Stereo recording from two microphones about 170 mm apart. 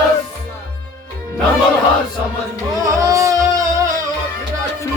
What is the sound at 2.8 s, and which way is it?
Music, 20° right (ahead or behind).